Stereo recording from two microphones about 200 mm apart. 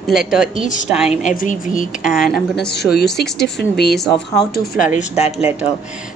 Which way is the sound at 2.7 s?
55° left (ahead or behind).